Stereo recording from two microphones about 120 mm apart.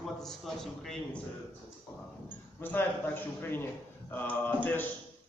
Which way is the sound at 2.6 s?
15° left (ahead or behind).